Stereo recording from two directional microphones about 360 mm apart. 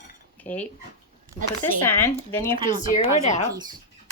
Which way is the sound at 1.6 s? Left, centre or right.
Centre.